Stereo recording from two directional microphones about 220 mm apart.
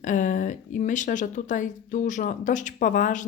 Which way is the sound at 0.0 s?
35° left (ahead or behind).